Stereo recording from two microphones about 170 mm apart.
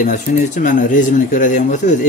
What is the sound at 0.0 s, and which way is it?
Speech, 45° left (ahead or behind).